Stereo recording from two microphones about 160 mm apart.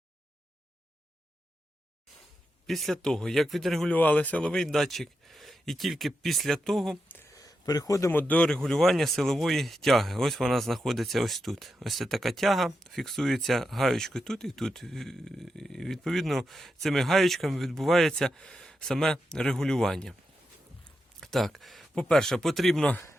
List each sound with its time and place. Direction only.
2.6 s speech: centre (ahead or behind)
7.2 s a sound: 20° left (ahead or behind)
8.2 s speech: 10° left (ahead or behind)
21.2 s speech: centre (ahead or behind)